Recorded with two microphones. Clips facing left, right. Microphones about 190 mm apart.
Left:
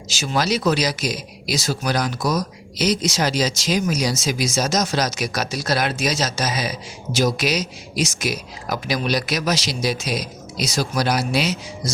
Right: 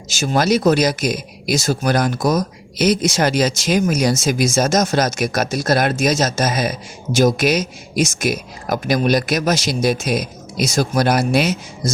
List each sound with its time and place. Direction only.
0.1 s speech: 50° right (ahead or behind)